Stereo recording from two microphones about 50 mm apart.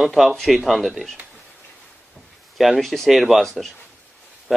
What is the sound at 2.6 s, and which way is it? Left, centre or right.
Speech, centre.